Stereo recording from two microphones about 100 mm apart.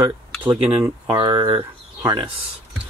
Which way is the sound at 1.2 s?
45° right (ahead or behind).